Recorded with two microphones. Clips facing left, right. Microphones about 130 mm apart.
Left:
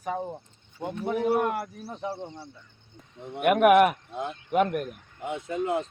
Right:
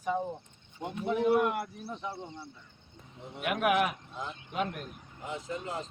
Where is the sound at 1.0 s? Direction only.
40° left (ahead or behind).